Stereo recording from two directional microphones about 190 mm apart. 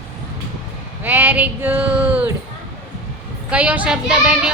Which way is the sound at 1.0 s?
10° right (ahead or behind).